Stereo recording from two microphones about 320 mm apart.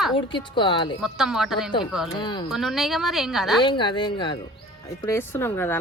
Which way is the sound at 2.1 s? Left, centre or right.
Centre.